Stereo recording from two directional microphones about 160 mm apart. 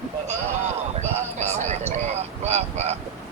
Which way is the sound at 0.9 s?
40° right (ahead or behind).